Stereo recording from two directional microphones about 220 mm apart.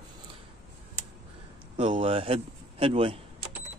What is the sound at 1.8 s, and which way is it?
Speech, 25° right (ahead or behind).